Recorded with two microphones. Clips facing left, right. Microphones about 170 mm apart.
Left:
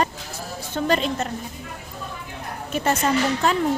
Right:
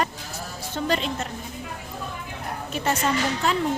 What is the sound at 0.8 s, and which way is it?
Speech, 45° left (ahead or behind).